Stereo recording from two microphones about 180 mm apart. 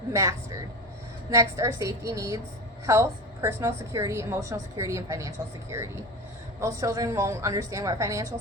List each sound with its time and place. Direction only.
0.1 s a woman's voice: 20° right (ahead or behind)